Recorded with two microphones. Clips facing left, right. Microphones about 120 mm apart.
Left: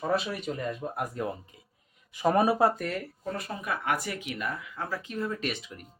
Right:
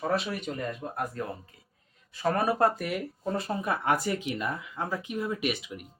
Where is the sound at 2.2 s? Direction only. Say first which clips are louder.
Left 2 dB; 15° left (ahead or behind).